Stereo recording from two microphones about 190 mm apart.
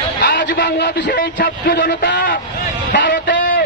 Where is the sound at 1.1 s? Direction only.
45° left (ahead or behind).